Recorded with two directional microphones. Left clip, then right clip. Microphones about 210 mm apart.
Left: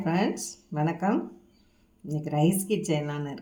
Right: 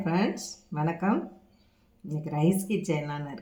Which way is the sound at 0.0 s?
20° left (ahead or behind).